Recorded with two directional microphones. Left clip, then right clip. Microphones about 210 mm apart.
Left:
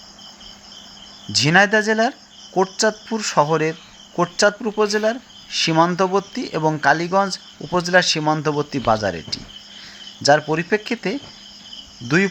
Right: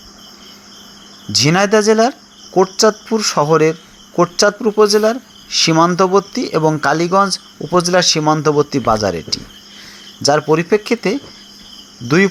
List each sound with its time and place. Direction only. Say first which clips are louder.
1.3 s speech: right 2 dB; 5° right (ahead or behind)